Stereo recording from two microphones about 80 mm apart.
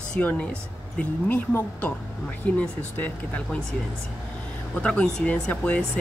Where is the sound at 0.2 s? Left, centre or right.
Centre.